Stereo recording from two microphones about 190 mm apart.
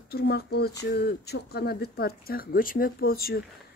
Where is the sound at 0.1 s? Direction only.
55° left (ahead or behind).